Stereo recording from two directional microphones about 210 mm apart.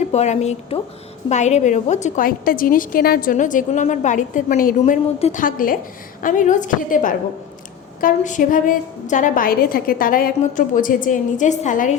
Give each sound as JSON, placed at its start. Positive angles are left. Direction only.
{"t": 0.0, "sound": "a woman's voice", "side_deg": 30}